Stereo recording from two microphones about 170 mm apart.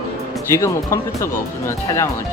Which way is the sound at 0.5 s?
15° left (ahead or behind).